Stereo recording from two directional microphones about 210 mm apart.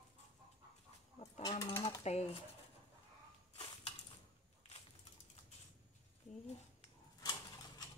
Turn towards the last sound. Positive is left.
turn(degrees=20)  # may be behind; listen again after turning